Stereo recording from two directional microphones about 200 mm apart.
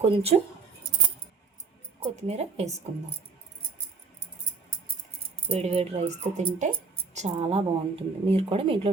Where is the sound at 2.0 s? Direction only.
35° right (ahead or behind).